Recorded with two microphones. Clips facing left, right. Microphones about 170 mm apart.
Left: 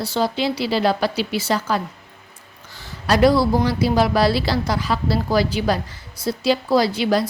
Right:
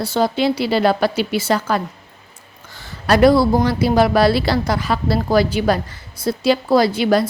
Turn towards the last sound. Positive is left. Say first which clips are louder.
# right 3 dB
turn(degrees=-55)  # may be behind; listen again after turning